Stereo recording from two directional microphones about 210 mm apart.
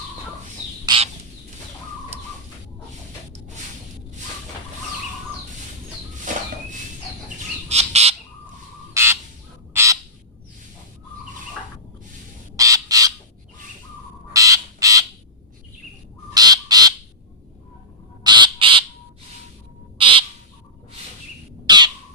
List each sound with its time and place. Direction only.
0.9 s bird: 25° right (ahead or behind)
6.3 s a sound: 35° right (ahead or behind)
7.7 s squawk: 30° right (ahead or behind)
8.9 s bird: 10° right (ahead or behind)
9.7 s crow: 15° right (ahead or behind)
12.5 s bird: 15° right (ahead or behind)
14.3 s a sound: 15° right (ahead or behind)
16.3 s bird: 20° right (ahead or behind)
18.2 s squawk: 20° right (ahead or behind)
20.0 s bird: 25° right (ahead or behind)
21.7 s squawk: 20° right (ahead or behind)